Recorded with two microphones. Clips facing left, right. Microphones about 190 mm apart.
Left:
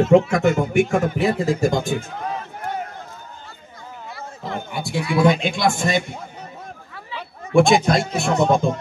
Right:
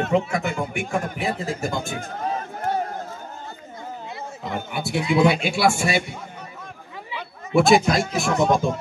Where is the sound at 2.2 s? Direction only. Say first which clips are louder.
Right 2 dB; 35° right (ahead or behind).